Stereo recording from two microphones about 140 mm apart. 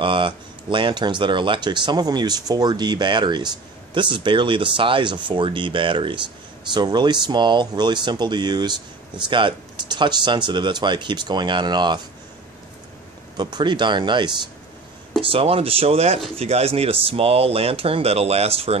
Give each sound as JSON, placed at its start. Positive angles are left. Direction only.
{"t": 0.0, "sound": "speech", "side_deg": -35}
{"t": 13.4, "sound": "speech", "side_deg": -30}